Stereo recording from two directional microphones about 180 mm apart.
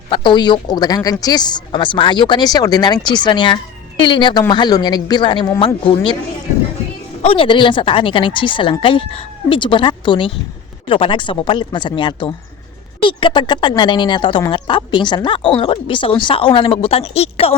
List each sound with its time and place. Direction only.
0.1 s speech: 25° left (ahead or behind)
7.2 s speech: 30° left (ahead or behind)